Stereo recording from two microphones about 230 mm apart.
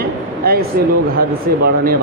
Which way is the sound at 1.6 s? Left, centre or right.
Right.